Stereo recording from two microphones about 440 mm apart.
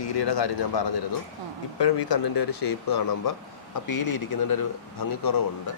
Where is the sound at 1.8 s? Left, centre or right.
Left.